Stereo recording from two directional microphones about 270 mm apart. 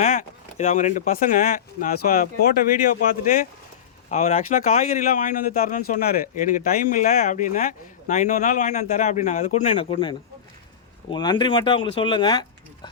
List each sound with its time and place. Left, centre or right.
0.0 s speech: left